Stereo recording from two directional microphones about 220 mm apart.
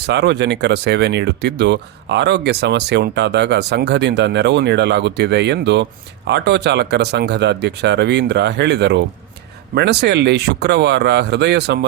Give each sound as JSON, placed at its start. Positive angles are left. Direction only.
{"t": 0.0, "sound": "speech", "side_deg": -50}